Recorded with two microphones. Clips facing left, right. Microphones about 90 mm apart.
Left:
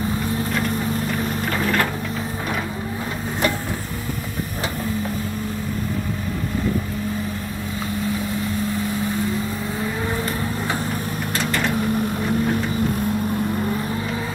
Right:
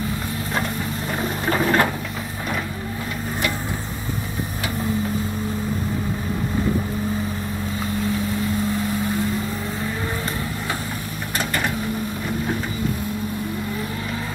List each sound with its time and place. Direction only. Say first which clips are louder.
1.5 s sewing machine: right 4 dB; 30° right (ahead or behind)